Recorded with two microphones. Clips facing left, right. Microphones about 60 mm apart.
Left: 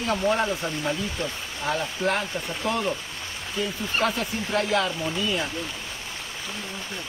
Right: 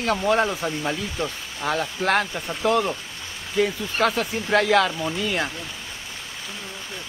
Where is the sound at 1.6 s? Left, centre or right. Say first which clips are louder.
Right 3 dB; right.